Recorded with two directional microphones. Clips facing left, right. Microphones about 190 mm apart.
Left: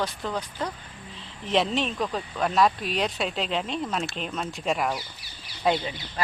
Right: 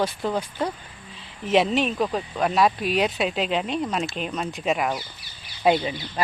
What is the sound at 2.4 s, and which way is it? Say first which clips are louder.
Speech: right 2 dB; 5° right (ahead or behind).